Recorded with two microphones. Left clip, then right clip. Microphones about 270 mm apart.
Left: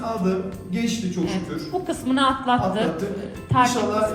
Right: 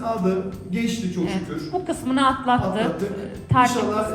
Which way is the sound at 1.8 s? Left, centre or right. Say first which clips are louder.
Right 1 dB; centre.